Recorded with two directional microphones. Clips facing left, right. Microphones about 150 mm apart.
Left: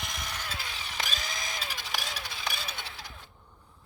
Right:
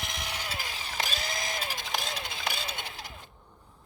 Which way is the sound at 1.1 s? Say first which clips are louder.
Right 3 dB; 45° right (ahead or behind).